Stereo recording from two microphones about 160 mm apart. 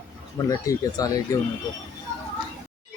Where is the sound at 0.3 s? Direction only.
20° left (ahead or behind).